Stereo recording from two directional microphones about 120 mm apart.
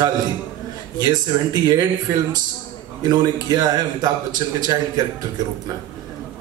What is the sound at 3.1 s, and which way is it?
Speech, 35° right (ahead or behind).